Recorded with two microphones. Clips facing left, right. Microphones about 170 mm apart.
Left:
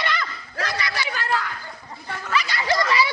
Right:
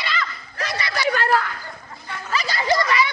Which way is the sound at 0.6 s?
25° right (ahead or behind).